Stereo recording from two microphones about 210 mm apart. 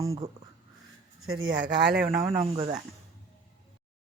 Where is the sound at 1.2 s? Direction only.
75° right (ahead or behind).